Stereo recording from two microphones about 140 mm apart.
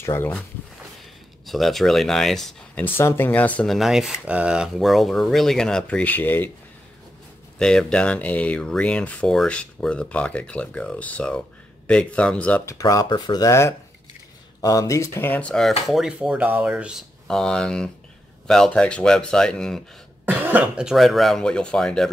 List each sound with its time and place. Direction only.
0.0 s speech: 20° left (ahead or behind)
1.4 s speech: centre (ahead or behind)
2.8 s speech: 15° left (ahead or behind)
3.7 s speech: centre (ahead or behind); by 6.5 s 15° left (ahead or behind)
7.5 s speech: 5° left (ahead or behind)
12.6 s speech: 25° left (ahead or behind); by 15.7 s 5° left (ahead or behind)
15.9 s speech: 5° right (ahead or behind)
17.3 s speech: 5° left (ahead or behind)
20.2 s speech: 10° right (ahead or behind); by 22.1 s 5° left (ahead or behind)